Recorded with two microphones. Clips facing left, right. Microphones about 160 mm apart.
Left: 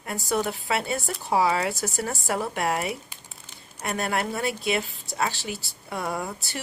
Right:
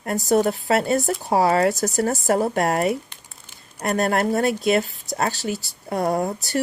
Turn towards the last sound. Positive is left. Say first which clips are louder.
# right 8 dB
turn(degrees=-40)  # may be behind; listen again after turning